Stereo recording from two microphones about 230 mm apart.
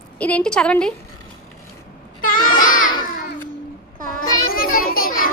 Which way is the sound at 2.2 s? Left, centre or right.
Left.